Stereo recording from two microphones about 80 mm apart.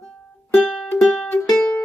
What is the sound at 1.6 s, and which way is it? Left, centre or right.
Music, centre.